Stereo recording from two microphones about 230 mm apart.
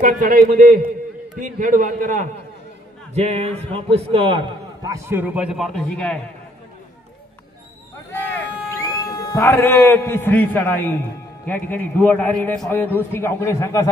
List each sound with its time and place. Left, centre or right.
0.0 s a man's voice: right; by 6.1 s centre
8.1 s a sound: centre
11.4 s a man's voice: centre